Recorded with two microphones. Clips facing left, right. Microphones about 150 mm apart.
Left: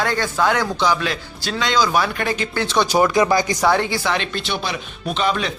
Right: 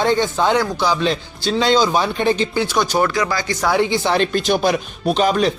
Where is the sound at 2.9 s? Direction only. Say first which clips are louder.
Left 7 dB; 15° left (ahead or behind).